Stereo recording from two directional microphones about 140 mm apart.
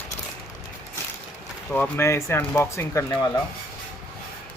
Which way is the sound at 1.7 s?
15° left (ahead or behind).